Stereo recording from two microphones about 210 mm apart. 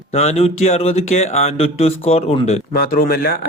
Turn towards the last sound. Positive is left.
turn(degrees=45)  # may be behind; listen again after turning